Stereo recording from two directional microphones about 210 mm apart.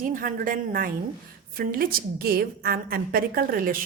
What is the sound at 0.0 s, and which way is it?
A woman's voice, 40° right (ahead or behind).